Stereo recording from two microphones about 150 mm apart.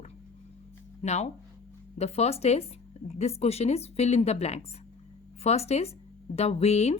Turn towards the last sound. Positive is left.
turn(degrees=45)  # may be behind; listen again after turning